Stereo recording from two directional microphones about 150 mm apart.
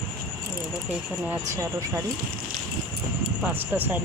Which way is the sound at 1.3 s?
20° right (ahead or behind).